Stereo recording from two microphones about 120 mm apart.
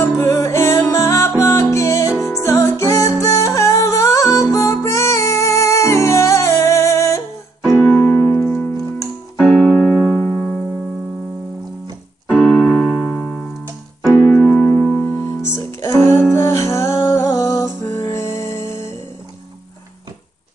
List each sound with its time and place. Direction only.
0.2 s music: 25° left (ahead or behind)
7.7 s keyboard: 20° left (ahead or behind)
9.4 s keyboard: centre (ahead or behind)
12.3 s keyboard: 10° left (ahead or behind)
13.1 s music: 15° left (ahead or behind)